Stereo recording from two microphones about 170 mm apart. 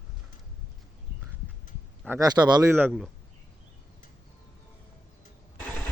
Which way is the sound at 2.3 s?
25° right (ahead or behind).